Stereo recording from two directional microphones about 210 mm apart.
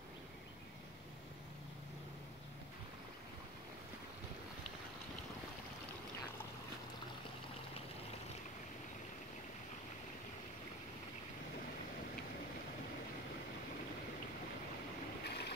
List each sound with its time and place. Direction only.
15.2 s boat: 50° left (ahead or behind)